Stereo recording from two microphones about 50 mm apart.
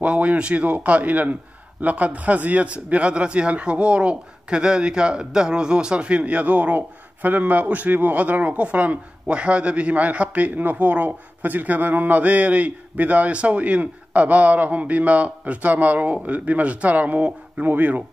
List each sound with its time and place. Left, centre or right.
0.0 s a man's voice: right